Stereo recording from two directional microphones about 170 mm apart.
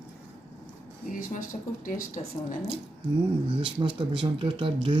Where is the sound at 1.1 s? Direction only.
55° left (ahead or behind).